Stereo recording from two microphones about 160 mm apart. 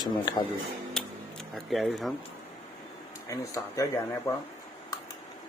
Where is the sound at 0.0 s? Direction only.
25° left (ahead or behind).